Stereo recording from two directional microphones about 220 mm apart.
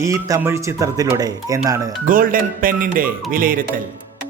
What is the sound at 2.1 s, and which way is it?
Speech, 40° right (ahead or behind).